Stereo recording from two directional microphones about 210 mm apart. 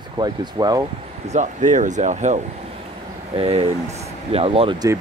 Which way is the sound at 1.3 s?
35° right (ahead or behind).